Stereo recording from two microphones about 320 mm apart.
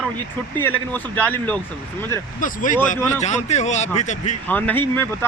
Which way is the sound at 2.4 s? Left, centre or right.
Left.